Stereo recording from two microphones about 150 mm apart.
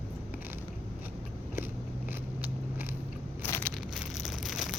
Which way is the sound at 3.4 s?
15° left (ahead or behind).